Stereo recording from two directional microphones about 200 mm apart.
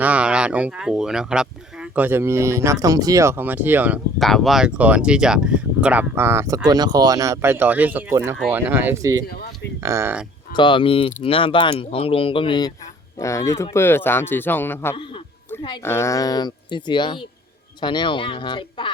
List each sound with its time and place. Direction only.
0.0 s speech: 5° right (ahead or behind)
9.2 s speech: 50° left (ahead or behind)
9.8 s speech: 15° right (ahead or behind)
10.5 s speech: 25° left (ahead or behind)